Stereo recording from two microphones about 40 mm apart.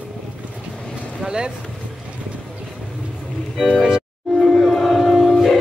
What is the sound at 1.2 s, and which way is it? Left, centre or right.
Speech, centre.